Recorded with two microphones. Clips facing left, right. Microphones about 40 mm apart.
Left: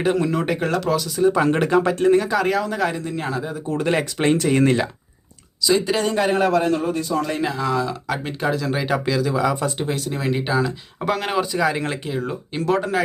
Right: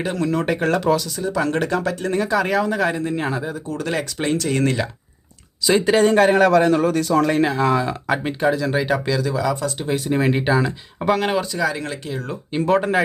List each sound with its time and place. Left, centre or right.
0.0 s speech: centre
1.2 s speech: left
2.0 s speech: centre
3.1 s speech: centre
3.7 s speech: left
4.4 s speech: centre
5.6 s a man's voice: right
7.3 s speech: right
8.1 s speech: centre
9.3 s speech: centre
10.0 s speech: right
10.5 s speech: centre
11.5 s speech: centre
12.5 s speech: centre